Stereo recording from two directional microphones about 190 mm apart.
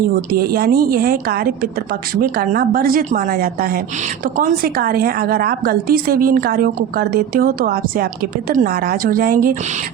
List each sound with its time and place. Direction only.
0.3 s a woman's voice: 55° right (ahead or behind)